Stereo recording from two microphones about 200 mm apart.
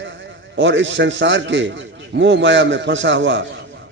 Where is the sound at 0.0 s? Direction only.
65° right (ahead or behind).